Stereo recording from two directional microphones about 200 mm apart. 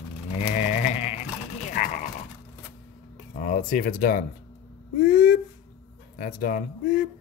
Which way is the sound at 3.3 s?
40° left (ahead or behind).